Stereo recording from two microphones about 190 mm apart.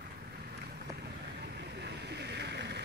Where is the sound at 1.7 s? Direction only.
65° right (ahead or behind).